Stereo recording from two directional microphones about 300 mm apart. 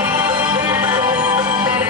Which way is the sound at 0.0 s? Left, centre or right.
Centre.